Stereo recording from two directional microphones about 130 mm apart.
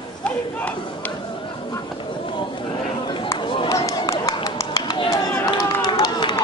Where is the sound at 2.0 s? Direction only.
40° left (ahead or behind).